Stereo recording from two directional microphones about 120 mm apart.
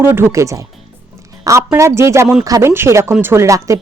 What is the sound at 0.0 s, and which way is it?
Speech, 20° right (ahead or behind).